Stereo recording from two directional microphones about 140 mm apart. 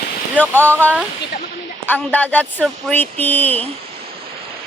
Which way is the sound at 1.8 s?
15° left (ahead or behind).